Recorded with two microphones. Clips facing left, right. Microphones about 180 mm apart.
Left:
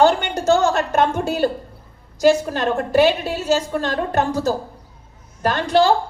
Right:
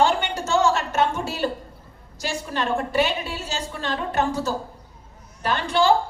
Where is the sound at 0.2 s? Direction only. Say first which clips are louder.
Left 5 dB; 60° left (ahead or behind).